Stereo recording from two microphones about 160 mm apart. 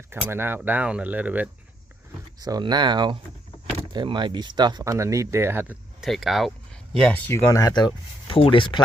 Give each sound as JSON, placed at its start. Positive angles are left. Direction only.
{"t": 0.3, "sound": "speech", "side_deg": -15}
{"t": 2.4, "sound": "speech", "side_deg": -25}
{"t": 6.1, "sound": "speech", "side_deg": 0}
{"t": 7.3, "sound": "speech", "side_deg": 15}